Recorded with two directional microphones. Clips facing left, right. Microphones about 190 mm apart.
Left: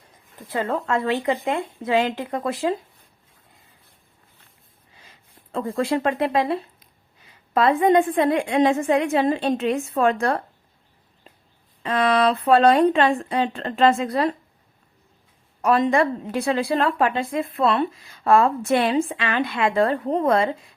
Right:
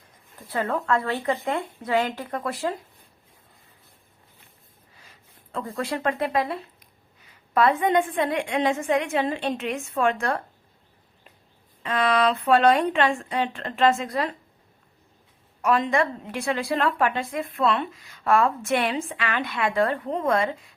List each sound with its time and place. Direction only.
0.3 s speech: 25° left (ahead or behind)
5.5 s a woman's voice: 30° left (ahead or behind)
11.8 s a woman's voice: 35° left (ahead or behind)
15.6 s a woman's voice: 35° left (ahead or behind)